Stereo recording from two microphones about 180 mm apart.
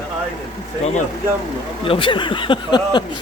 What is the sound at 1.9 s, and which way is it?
Speech, 30° left (ahead or behind).